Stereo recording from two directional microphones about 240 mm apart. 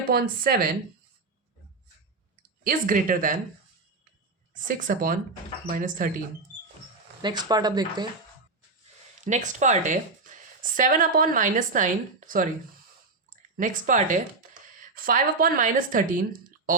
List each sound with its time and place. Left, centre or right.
0.1 s speech: right
2.6 s speech: right
4.5 s speech: right
7.2 s speech: centre
9.2 s speech: right
13.6 s speech: right